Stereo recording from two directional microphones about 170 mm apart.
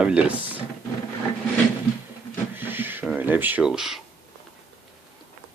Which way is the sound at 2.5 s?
10° right (ahead or behind).